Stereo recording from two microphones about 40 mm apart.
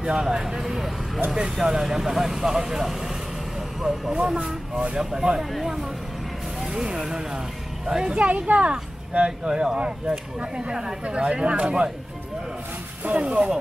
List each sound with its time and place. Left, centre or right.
0.0 s speech: centre
5.1 s speech: centre
5.5 s speech: centre; by 11.9 s right
13.0 s speech: right